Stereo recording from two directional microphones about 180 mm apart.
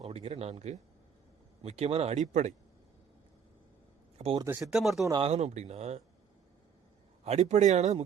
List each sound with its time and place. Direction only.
0.1 s speech: 35° right (ahead or behind)
4.4 s speech: 15° right (ahead or behind)
4.7 s speech: centre (ahead or behind)
5.2 s speech: 35° right (ahead or behind)
7.3 s speech: 40° right (ahead or behind)